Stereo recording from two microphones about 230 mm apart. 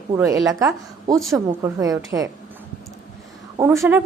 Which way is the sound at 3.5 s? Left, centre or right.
Centre.